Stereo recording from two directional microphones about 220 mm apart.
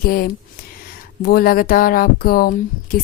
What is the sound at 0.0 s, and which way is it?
Speech, 40° left (ahead or behind).